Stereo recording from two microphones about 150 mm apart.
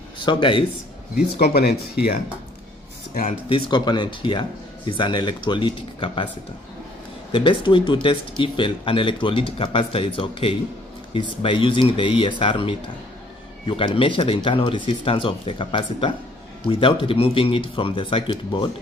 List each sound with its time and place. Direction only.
0.2 s speech: 30° left (ahead or behind)
1.4 s speech: 90° left
3.2 s speech: 35° left (ahead or behind)
7.3 s speech: 35° left (ahead or behind)